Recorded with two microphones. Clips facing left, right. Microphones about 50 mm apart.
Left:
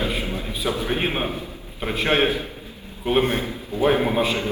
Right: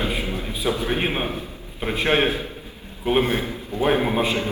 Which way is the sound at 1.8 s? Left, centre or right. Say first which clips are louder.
Right 1 dB; centre.